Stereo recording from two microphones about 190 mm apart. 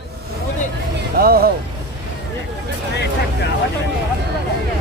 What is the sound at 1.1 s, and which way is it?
Speech, 50° right (ahead or behind).